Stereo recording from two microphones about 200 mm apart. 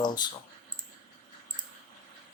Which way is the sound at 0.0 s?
20° left (ahead or behind).